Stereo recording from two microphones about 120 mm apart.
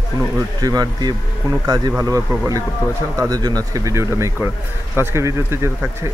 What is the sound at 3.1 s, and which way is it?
Speech, 30° right (ahead or behind).